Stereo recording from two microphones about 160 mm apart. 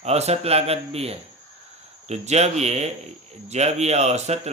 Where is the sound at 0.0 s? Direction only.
40° right (ahead or behind).